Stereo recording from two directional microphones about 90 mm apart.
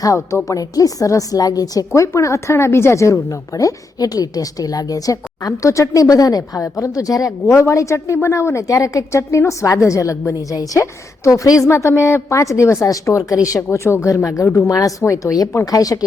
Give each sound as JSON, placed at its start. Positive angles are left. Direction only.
{"t": 0.0, "sound": "a woman's voice", "side_deg": 40}
{"t": 13.6, "sound": "a woman's voice", "side_deg": 25}